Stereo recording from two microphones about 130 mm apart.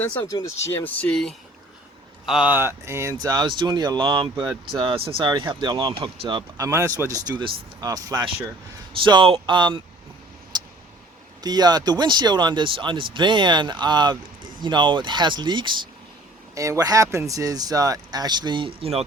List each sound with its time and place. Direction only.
0.3 s speech: 25° left (ahead or behind); by 1.3 s 10° left (ahead or behind)
2.2 s speech: 5° right (ahead or behind)
2.5 s speech: 20° right (ahead or behind); by 6.7 s 35° right (ahead or behind)
6.7 s speech: 25° right (ahead or behind)
8.9 s speech: 40° right (ahead or behind)
10.5 s vehicle: 35° right (ahead or behind)
11.4 s speech: 30° right (ahead or behind)
16.6 s speech: 25° right (ahead or behind); by 19.0 s 50° right (ahead or behind)